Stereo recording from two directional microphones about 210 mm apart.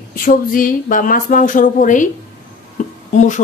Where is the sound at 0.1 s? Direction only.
40° left (ahead or behind).